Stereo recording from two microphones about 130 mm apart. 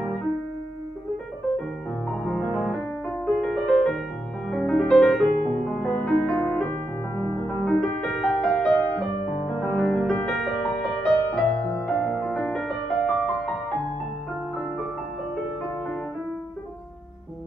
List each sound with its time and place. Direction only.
2.2 s music: centre (ahead or behind)